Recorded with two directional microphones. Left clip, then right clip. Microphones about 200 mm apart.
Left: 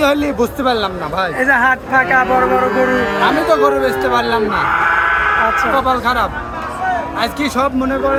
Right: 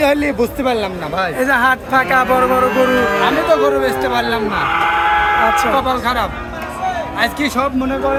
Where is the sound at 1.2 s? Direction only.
15° right (ahead or behind).